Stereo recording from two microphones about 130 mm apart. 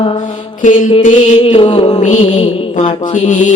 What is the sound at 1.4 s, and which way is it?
Mantra, 45° left (ahead or behind).